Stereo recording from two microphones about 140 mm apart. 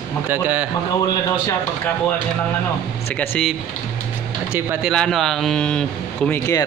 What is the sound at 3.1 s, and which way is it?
Speech, 15° left (ahead or behind).